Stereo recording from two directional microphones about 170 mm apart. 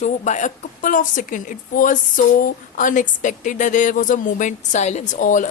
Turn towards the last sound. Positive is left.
turn(degrees=50)  # may be behind; listen again after turning